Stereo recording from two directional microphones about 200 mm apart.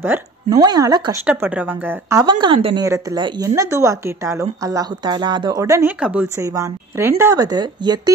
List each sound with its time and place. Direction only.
0.0 s a woman's voice: 15° right (ahead or behind)
1.2 s a woman's voice: 5° right (ahead or behind)